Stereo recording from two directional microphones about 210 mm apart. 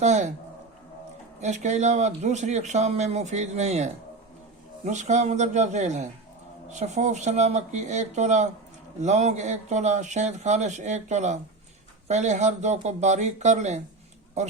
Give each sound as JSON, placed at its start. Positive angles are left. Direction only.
{"t": 0.0, "sound": "speech", "side_deg": -35}
{"t": 1.4, "sound": "speech", "side_deg": -35}